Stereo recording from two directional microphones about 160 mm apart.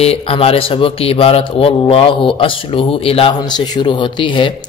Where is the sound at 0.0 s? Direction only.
35° left (ahead or behind).